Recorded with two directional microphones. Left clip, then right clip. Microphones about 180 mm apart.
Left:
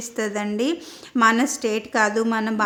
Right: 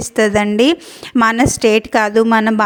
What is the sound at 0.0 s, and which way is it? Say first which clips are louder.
A woman's voice: right 12 dB; 50° right (ahead or behind).